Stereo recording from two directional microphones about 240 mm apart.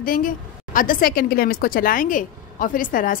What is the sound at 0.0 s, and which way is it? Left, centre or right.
A woman's voice, left.